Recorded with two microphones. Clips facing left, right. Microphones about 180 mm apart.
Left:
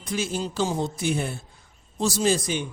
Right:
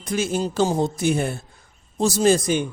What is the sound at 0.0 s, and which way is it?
A man's voice, 45° right (ahead or behind).